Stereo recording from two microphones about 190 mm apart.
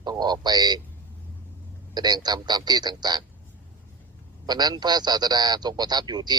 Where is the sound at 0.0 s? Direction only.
20° right (ahead or behind).